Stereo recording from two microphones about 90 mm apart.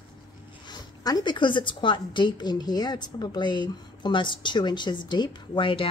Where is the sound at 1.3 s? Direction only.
65° left (ahead or behind).